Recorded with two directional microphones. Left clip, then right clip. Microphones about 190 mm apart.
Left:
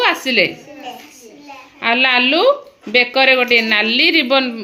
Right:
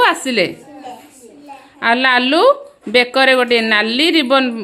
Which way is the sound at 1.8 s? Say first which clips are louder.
Even; 15° right (ahead or behind).